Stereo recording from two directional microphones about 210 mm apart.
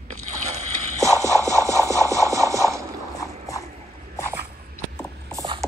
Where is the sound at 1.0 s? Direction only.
15° right (ahead or behind).